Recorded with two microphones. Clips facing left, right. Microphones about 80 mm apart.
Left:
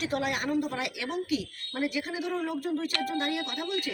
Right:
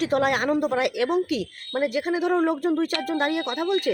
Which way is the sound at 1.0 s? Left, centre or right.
Right.